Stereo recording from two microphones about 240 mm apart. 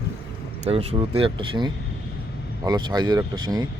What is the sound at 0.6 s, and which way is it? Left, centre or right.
Speech, right.